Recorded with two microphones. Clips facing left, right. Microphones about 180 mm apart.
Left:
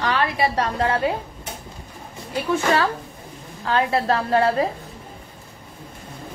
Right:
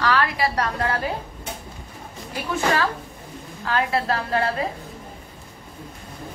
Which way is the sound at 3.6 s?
35° left (ahead or behind).